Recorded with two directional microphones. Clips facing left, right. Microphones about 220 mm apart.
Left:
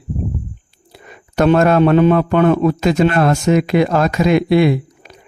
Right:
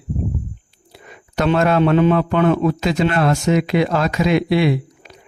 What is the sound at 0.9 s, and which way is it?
A man's voice, 50° left (ahead or behind).